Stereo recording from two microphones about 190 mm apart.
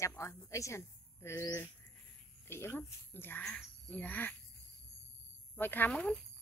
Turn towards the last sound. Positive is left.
turn(degrees=5)  # may be behind; listen again after turning